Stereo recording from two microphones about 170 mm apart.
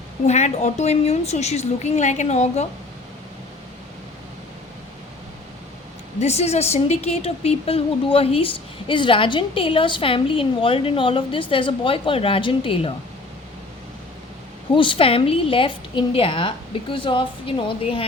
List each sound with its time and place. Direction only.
0.3 s a woman's voice: 40° left (ahead or behind)
6.1 s a woman's voice: 40° left (ahead or behind)
14.7 s a woman's voice: 30° left (ahead or behind)